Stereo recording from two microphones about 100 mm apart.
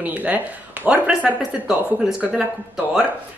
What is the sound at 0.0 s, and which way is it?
Speech, 15° right (ahead or behind).